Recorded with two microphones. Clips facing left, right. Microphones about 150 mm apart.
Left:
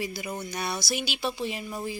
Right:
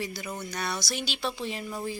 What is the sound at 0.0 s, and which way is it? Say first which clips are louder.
Speech: left 2 dB; 10° left (ahead or behind).